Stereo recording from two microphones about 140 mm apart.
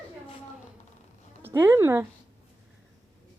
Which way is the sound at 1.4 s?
15° right (ahead or behind).